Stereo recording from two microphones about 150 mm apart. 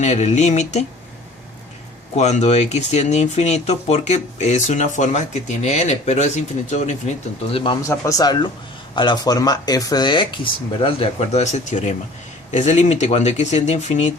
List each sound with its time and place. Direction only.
0.0 s speech: 50° left (ahead or behind)
2.1 s speech: 50° left (ahead or behind)
7.5 s speech: 35° left (ahead or behind)
7.8 s speech: 20° left (ahead or behind); by 14.1 s 50° left (ahead or behind)